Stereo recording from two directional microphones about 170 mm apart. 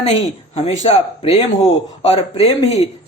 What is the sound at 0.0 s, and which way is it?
Speech, 35° left (ahead or behind).